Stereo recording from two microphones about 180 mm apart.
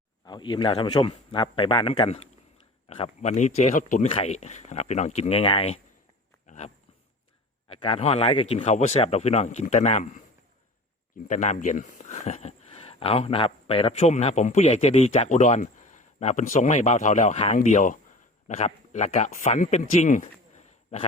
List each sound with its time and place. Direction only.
0.3 s a man's voice: 25° left (ahead or behind); by 4.0 s 45° left (ahead or behind)
4.0 s speech: 30° left (ahead or behind)
7.7 s speech: 30° left (ahead or behind)
11.3 s speech: 40° left (ahead or behind)